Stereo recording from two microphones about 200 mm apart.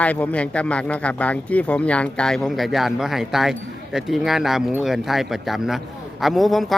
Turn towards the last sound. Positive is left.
turn(degrees=0)  # may be behind; listen again after turning